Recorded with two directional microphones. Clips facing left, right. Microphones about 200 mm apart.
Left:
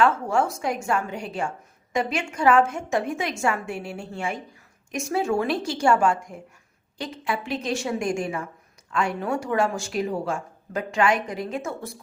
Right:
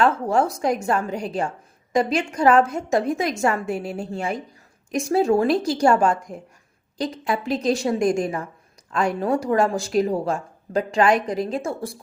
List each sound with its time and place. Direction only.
0.0 s a woman's voice: 35° right (ahead or behind)